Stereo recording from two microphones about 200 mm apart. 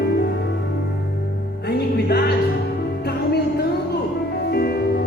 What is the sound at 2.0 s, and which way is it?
Music, 55° left (ahead or behind).